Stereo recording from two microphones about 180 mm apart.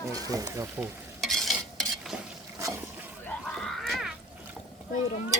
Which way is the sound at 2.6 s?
15° right (ahead or behind).